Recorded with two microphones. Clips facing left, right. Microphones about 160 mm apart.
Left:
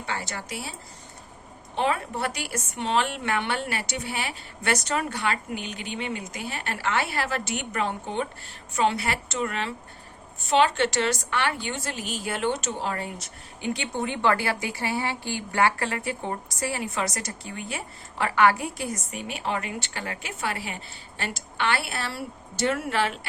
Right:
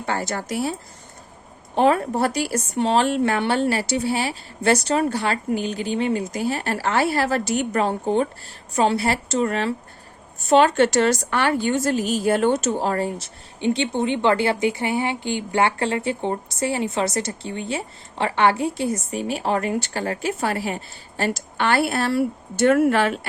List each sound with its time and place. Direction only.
0.0 s a woman's voice: 45° right (ahead or behind)